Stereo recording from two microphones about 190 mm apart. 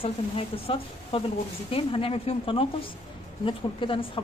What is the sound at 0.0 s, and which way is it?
A woman's voice, 30° left (ahead or behind).